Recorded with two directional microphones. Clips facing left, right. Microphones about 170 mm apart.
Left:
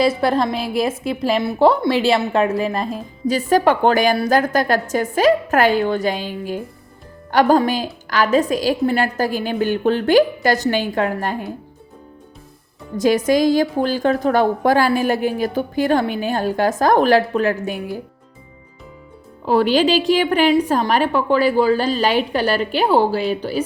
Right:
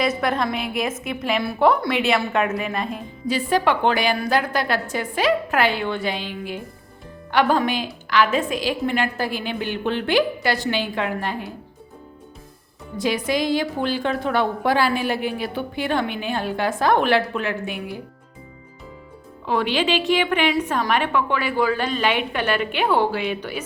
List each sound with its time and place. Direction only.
0.0 s a woman's voice: 30° left (ahead or behind)
13.0 s a woman's voice: 45° left (ahead or behind)
19.5 s speech: 40° left (ahead or behind)